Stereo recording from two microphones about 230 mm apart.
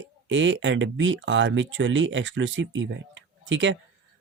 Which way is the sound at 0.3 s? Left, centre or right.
Right.